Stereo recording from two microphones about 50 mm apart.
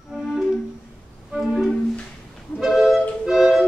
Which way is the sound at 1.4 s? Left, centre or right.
Centre.